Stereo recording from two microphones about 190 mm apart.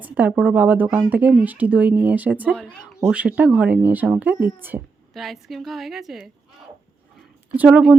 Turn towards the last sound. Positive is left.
turn(degrees=-5)  # may be behind; listen again after turning